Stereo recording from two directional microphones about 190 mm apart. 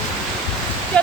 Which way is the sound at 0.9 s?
5° left (ahead or behind).